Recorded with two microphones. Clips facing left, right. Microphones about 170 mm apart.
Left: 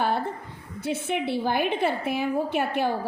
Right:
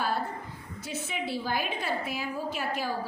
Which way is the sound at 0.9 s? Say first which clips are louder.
Left 7 dB; 60° left (ahead or behind).